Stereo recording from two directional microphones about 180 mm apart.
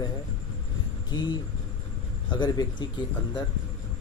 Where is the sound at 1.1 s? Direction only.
25° left (ahead or behind).